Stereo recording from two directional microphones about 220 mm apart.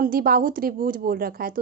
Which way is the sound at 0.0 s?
40° right (ahead or behind).